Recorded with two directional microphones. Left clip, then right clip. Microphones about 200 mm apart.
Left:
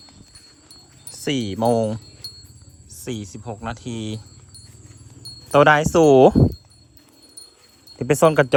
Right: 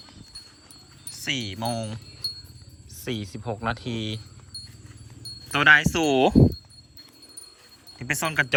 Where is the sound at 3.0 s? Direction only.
20° left (ahead or behind).